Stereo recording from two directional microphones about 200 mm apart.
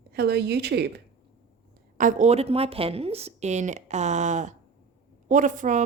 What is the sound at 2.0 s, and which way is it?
A woman's voice, 40° right (ahead or behind).